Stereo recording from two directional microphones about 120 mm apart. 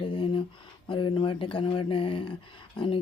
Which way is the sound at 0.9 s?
45° left (ahead or behind).